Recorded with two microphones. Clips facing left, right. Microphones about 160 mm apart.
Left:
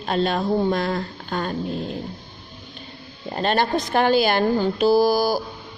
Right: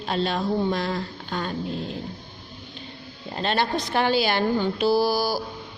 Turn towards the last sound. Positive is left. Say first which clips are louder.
# left 4 dB
turn(degrees=50)  # may be behind; listen again after turning